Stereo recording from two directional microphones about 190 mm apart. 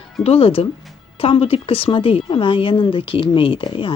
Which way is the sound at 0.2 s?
30° left (ahead or behind).